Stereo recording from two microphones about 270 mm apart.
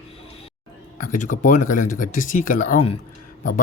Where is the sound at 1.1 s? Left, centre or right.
Left.